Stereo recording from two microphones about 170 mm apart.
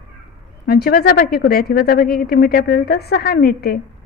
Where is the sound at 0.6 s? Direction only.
65° left (ahead or behind).